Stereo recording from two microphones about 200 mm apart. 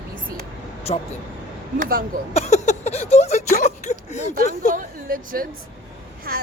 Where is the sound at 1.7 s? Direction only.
45° right (ahead or behind).